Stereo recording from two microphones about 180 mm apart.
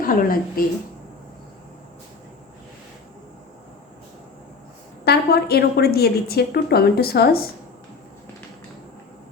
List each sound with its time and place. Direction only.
0.0 s a woman's voice: 50° left (ahead or behind)
5.0 s a woman's voice: 65° left (ahead or behind)